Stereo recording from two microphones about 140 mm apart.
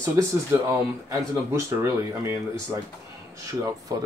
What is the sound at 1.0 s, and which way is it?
Speech, 20° right (ahead or behind).